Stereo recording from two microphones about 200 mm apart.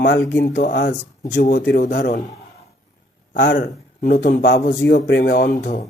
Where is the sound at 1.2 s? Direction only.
40° left (ahead or behind).